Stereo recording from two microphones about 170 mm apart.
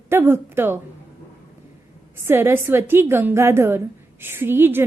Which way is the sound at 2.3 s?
15° right (ahead or behind).